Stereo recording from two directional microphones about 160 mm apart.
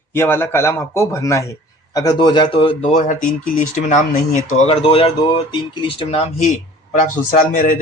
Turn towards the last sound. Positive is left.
turn(degrees=60)  # may be behind; listen again after turning